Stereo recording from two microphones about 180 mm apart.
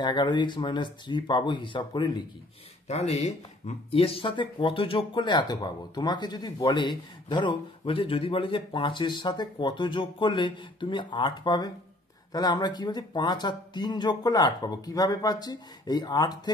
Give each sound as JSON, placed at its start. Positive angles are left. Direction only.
{"t": 0.0, "sound": "speech", "side_deg": 25}
{"t": 2.9, "sound": "speech", "side_deg": 35}